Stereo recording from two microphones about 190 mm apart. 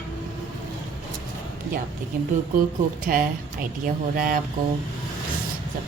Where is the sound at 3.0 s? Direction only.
50° right (ahead or behind).